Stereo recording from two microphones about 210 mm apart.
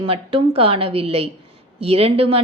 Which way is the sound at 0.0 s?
25° right (ahead or behind).